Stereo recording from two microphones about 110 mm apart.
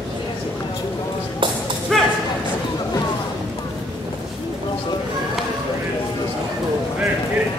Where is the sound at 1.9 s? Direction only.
5° left (ahead or behind).